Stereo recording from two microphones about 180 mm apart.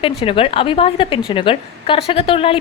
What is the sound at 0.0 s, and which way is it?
Speech, 30° left (ahead or behind).